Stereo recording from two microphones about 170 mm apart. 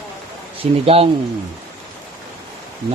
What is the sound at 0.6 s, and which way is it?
Speech, 35° right (ahead or behind).